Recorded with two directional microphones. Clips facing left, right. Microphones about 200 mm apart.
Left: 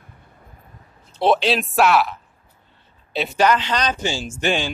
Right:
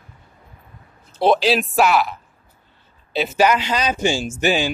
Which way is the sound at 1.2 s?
Centre (ahead or behind).